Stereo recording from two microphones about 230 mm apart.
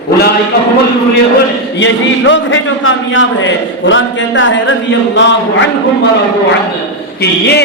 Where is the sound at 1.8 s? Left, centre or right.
Left.